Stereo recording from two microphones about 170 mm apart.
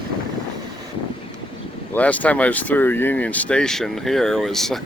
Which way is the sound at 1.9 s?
10° left (ahead or behind).